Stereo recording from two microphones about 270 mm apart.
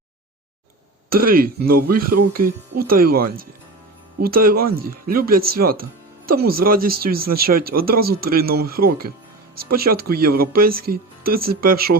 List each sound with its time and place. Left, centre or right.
1.1 s speech: right